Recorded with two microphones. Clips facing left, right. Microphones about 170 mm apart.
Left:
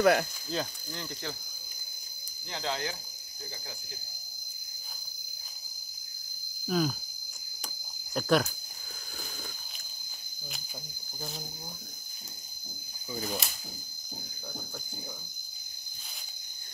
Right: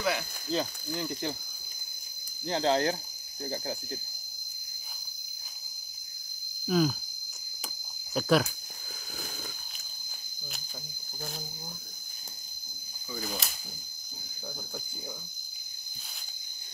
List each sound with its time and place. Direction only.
0.0 s speech: 55° left (ahead or behind)
0.5 s speech: centre (ahead or behind)
2.4 s speech: 35° right (ahead or behind)
6.6 s speech: centre (ahead or behind)
8.1 s speech: centre (ahead or behind)
13.2 s speech: centre (ahead or behind)